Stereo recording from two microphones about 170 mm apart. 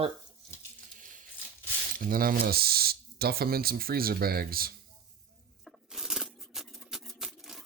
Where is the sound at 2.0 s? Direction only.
55° right (ahead or behind).